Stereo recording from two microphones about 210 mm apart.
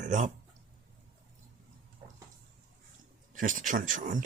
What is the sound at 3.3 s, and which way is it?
Speech, 40° right (ahead or behind).